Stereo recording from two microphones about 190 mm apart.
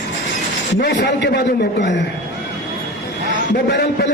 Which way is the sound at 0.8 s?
65° left (ahead or behind).